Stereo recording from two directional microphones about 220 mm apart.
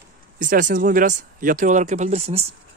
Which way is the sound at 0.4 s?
35° right (ahead or behind).